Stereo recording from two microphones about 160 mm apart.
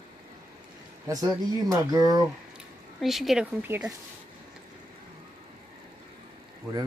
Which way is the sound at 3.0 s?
Centre (ahead or behind).